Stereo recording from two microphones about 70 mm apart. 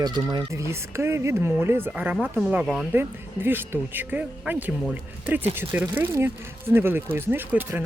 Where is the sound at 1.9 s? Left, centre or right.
Right.